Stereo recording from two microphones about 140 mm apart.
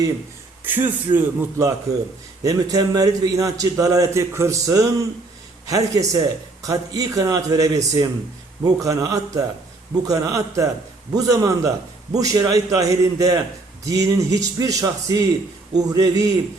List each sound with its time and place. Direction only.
0.6 s a man's voice: 15° right (ahead or behind)